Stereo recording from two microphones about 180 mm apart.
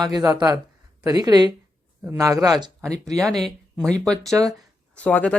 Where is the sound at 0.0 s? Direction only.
20° right (ahead or behind).